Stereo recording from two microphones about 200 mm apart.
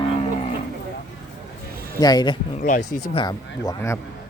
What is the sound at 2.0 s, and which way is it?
Speech, 20° left (ahead or behind).